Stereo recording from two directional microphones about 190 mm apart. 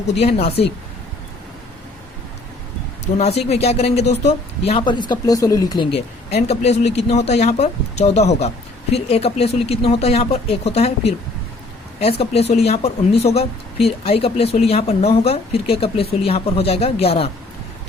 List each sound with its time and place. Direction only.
0.1 s speech: 35° left (ahead or behind)
3.2 s speech: 35° left (ahead or behind)